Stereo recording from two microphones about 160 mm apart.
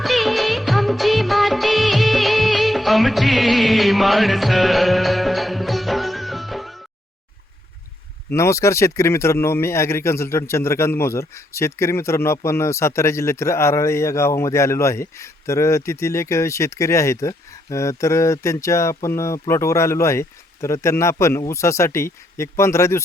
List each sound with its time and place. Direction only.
0.0 s music of bollywood: centre (ahead or behind)
8.3 s speech: 20° left (ahead or behind)